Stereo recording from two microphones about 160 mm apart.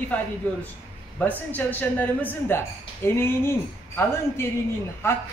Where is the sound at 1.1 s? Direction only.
10° left (ahead or behind).